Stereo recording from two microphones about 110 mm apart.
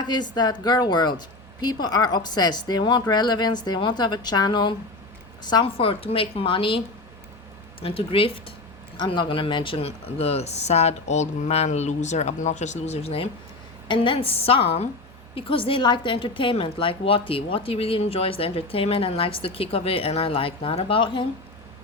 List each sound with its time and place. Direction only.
0.0 s a woman's voice: 40° left (ahead or behind)
5.6 s a woman's voice: 55° left (ahead or behind)
13.8 s a woman's voice: 50° left (ahead or behind)